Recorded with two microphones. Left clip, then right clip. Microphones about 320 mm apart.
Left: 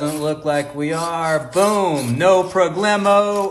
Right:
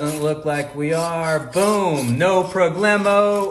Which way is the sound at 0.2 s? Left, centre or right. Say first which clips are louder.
Left 2 dB; centre.